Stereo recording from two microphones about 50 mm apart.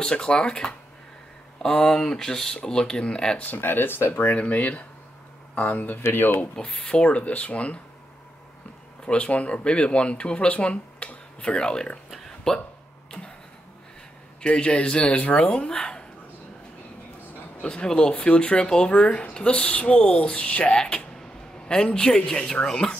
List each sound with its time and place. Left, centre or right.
0.0 s speech: centre
3.3 s speech: left
4.4 s speech: left
6.0 s speech: left
6.5 s speech: centre
9.0 s speech: centre
14.4 s speech: left
17.6 s speech: left